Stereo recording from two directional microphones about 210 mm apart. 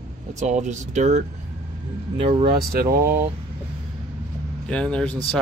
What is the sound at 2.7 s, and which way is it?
Speech, 45° right (ahead or behind).